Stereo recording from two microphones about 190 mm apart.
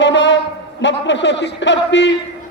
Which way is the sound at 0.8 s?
70° left (ahead or behind).